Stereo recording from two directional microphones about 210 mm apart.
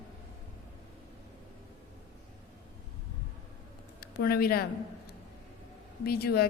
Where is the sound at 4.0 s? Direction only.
45° left (ahead or behind).